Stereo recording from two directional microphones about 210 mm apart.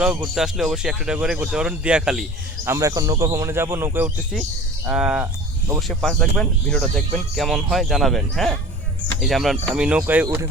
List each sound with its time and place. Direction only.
0.3 s speech: centre (ahead or behind)
2.6 s a man's voice: 15° right (ahead or behind)
5.9 s a man's voice: centre (ahead or behind); by 10.5 s 15° right (ahead or behind)